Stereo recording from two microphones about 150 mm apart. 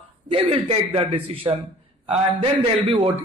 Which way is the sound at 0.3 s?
35° right (ahead or behind).